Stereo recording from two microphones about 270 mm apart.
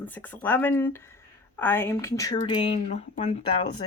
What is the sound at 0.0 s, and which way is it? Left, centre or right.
Speech, centre.